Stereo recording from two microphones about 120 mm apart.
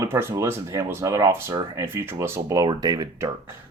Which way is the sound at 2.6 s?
35° right (ahead or behind).